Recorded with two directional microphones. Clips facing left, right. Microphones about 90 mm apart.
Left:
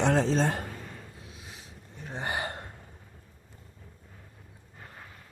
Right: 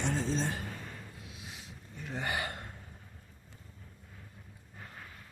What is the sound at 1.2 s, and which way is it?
Gasp, 35° left (ahead or behind).